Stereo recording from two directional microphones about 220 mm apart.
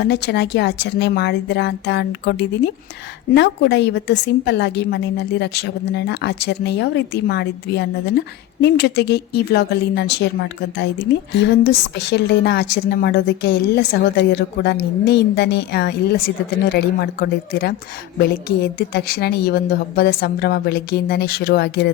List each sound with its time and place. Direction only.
0.0 s a woman's voice: 50° left (ahead or behind)
11.3 s a woman's voice: 50° left (ahead or behind)